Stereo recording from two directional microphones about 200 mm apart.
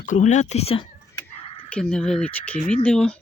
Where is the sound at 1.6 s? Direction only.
5° left (ahead or behind).